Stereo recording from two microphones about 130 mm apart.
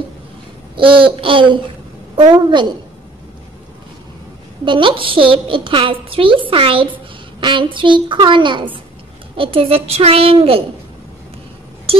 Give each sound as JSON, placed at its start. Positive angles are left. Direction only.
{"t": 0.7, "sound": "a woman's voice", "side_deg": -40}
{"t": 4.6, "sound": "a woman's voice", "side_deg": -40}